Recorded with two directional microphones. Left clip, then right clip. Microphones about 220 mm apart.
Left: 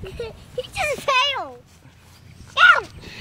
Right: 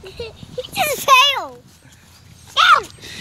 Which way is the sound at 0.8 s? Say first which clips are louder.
Right 7 dB; 40° right (ahead or behind).